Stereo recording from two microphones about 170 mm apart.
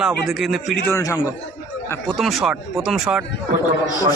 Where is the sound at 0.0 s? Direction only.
Centre (ahead or behind).